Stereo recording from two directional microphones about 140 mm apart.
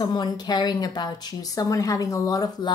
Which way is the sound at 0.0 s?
30° left (ahead or behind).